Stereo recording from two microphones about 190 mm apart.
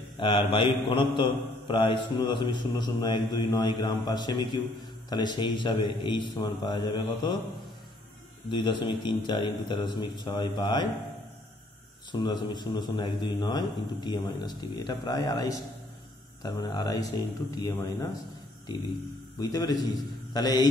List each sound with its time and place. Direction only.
0.2 s a man's voice: 25° left (ahead or behind)
8.5 s a man's voice: 25° left (ahead or behind)
12.1 s a man's voice: 20° left (ahead or behind)
19.4 s a man's voice: 20° left (ahead or behind)